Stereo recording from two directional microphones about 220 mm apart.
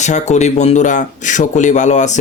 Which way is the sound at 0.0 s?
30° left (ahead or behind).